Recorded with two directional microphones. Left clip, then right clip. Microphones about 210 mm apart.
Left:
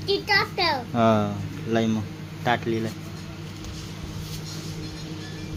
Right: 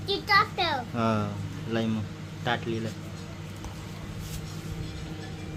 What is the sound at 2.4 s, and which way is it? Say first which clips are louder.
Speech: left 5 dB; 15° left (ahead or behind).